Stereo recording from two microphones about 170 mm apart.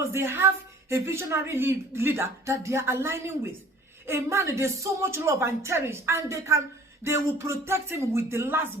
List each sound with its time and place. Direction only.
0.0 s a woman's voice: 15° right (ahead or behind)